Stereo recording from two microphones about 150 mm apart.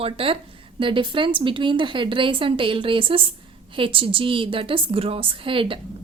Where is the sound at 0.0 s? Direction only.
40° right (ahead or behind).